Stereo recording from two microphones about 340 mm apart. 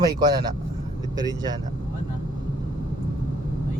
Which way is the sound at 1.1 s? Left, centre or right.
Centre.